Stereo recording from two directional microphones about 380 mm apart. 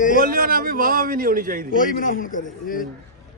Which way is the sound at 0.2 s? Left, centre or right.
Right.